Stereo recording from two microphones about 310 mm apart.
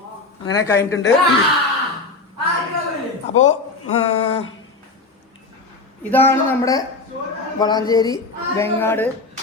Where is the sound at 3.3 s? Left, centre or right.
Left.